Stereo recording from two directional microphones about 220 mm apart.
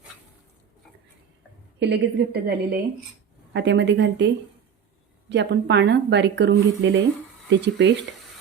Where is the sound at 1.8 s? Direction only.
50° right (ahead or behind).